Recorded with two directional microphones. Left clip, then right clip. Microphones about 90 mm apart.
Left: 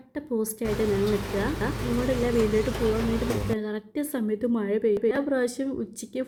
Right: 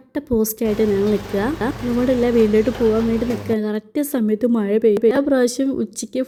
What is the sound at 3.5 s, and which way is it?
A woman's voice, 40° right (ahead or behind).